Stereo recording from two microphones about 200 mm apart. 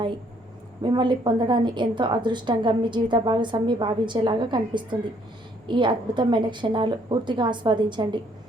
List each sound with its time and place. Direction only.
0.8 s a woman's voice: 25° right (ahead or behind)